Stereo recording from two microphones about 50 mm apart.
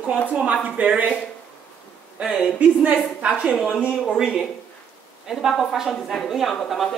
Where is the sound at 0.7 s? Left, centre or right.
Right.